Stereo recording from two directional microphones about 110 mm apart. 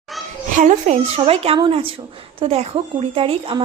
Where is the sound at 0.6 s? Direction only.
80° right.